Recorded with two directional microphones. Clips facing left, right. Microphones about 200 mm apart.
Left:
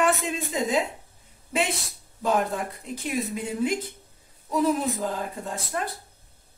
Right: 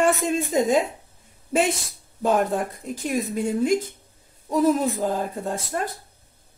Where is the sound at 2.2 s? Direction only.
45° right (ahead or behind).